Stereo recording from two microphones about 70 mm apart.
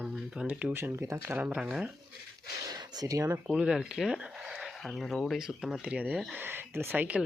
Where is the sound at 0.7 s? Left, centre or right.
Right.